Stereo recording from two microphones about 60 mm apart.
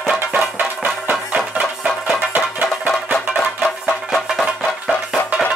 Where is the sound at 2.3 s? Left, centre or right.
Right.